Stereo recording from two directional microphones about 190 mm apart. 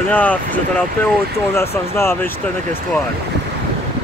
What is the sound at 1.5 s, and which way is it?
Speech, 15° left (ahead or behind).